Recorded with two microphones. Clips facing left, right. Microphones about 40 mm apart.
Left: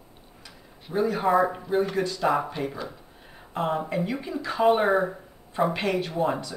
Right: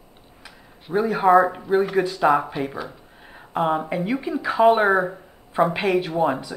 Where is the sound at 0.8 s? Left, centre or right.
Centre.